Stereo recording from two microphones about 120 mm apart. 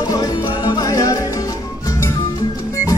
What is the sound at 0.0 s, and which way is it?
Music, 30° left (ahead or behind).